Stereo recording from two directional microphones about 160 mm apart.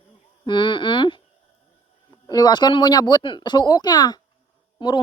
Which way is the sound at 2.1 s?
25° left (ahead or behind).